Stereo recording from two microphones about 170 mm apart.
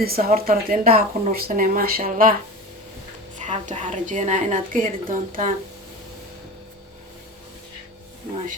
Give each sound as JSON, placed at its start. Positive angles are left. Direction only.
{"t": 0.0, "sound": "a woman's voice", "side_deg": -60}
{"t": 3.3, "sound": "a woman's voice", "side_deg": -45}